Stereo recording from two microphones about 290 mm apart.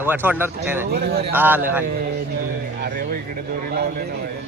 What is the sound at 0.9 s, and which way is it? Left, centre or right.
Speech, right.